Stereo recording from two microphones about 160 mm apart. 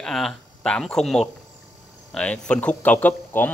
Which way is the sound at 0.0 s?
Centre (ahead or behind).